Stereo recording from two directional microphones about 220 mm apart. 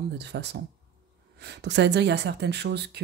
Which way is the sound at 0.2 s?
50° right (ahead or behind).